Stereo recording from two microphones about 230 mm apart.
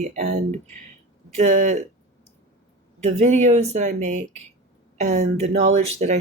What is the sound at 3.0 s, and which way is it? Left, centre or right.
Speech, right.